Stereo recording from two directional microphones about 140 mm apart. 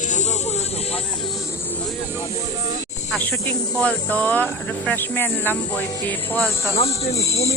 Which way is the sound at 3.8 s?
10° left (ahead or behind).